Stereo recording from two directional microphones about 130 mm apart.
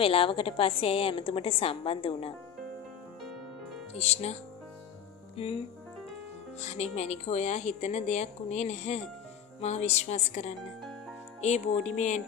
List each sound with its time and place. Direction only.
0.0 s a woman's voice: 45° left (ahead or behind)
3.9 s speech: 55° left (ahead or behind)
5.3 s music: 50° left (ahead or behind)
6.6 s speech: 55° left (ahead or behind)